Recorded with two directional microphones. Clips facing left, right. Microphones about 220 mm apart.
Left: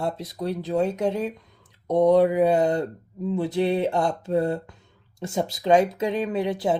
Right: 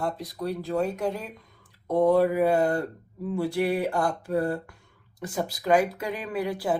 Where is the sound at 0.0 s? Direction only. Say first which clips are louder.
Left 2 dB; 25° left (ahead or behind).